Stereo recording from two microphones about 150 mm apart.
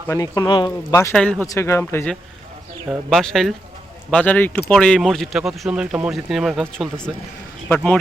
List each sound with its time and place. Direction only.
0.1 s speech: 20° left (ahead or behind)
1.1 s speech: 5° left (ahead or behind)
1.5 s speech: 20° left (ahead or behind)
3.1 s speech: 5° left (ahead or behind)